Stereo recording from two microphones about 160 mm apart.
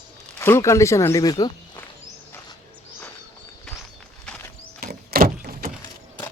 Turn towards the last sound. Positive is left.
turn(degrees=-70)  # may be behind; listen again after turning